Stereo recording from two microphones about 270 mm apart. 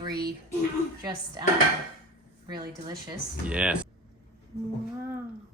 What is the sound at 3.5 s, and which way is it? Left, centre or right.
Speech, centre.